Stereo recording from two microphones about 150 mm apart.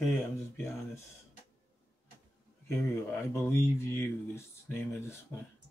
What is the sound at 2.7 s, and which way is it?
Speech, 15° left (ahead or behind).